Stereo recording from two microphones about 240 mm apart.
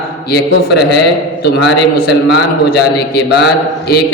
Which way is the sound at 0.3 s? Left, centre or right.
Left.